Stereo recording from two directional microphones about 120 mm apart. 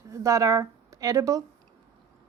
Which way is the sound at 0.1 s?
25° right (ahead or behind).